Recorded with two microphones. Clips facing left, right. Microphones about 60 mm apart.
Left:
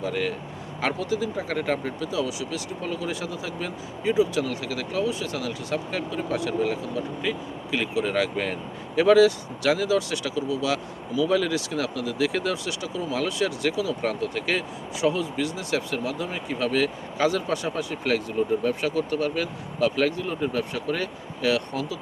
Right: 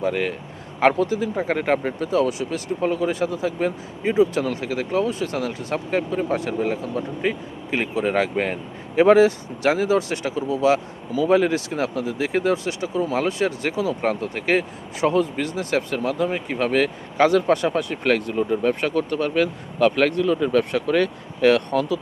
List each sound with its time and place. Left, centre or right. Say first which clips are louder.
0.0 s speech: right 4 dB; right